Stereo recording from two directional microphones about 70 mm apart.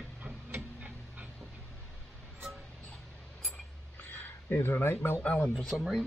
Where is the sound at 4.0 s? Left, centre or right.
Left.